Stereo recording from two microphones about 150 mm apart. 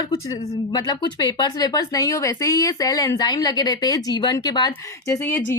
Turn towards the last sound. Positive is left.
turn(degrees=15)  # may be behind; listen again after turning